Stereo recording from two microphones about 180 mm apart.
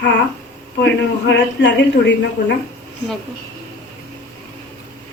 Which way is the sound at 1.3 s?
75° left (ahead or behind).